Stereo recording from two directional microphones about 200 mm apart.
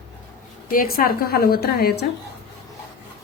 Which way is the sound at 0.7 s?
45° left (ahead or behind).